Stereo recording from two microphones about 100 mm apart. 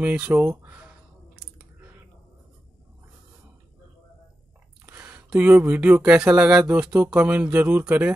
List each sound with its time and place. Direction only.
0.0 s speech: 15° right (ahead or behind)
4.8 s speech: 15° right (ahead or behind)